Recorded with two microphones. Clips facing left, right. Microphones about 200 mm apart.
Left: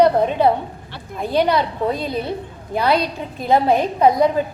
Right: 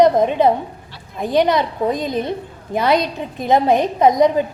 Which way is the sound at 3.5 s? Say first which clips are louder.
Right 1 dB; 20° right (ahead or behind).